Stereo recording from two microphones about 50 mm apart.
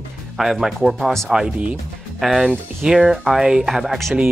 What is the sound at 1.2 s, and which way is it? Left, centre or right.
Speech, centre.